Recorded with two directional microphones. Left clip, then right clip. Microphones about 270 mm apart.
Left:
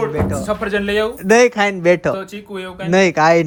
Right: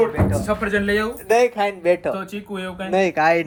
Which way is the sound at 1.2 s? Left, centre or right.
Left.